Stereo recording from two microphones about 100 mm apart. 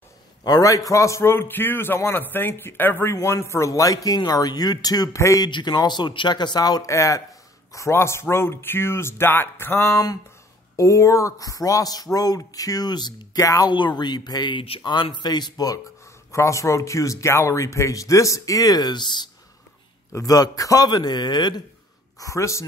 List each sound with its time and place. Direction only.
0.4 s a man's voice: 40° left (ahead or behind)
5.5 s a man's voice: 45° left (ahead or behind)
20.1 s speech: 35° left (ahead or behind)
22.2 s speech: 30° left (ahead or behind)